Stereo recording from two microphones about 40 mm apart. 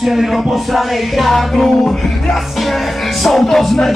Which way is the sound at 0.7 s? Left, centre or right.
Centre.